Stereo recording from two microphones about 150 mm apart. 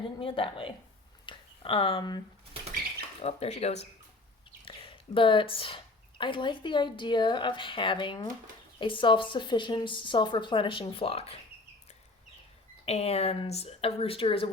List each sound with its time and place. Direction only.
0.2 s a woman's voice: 35° left (ahead or behind)
3.2 s speech: 45° left (ahead or behind)
4.6 s a woman's voice: 35° left (ahead or behind)
12.8 s speech: 45° left (ahead or behind)